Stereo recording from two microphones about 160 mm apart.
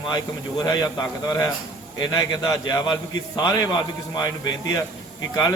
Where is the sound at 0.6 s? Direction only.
25° left (ahead or behind).